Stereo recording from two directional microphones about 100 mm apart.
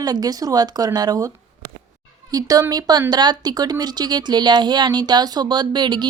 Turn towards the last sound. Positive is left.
turn(degrees=-50)  # may be behind; listen again after turning